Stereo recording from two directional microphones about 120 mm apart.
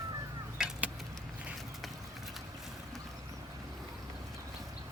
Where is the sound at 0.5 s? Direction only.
5° right (ahead or behind).